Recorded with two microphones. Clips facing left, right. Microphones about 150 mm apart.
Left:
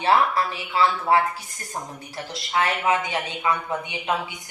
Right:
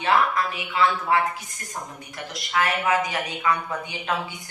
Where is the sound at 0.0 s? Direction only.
30° left (ahead or behind).